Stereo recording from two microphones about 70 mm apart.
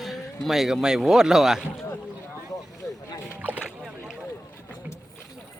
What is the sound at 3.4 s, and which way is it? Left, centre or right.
Splash, right.